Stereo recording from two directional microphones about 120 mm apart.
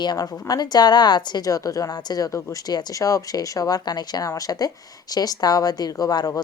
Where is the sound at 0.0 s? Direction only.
35° left (ahead or behind).